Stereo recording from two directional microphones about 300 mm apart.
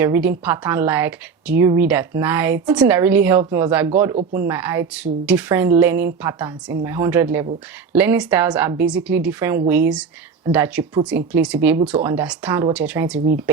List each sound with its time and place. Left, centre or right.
0.0 s speech: centre
4.1 s speech: right
4.4 s speech: centre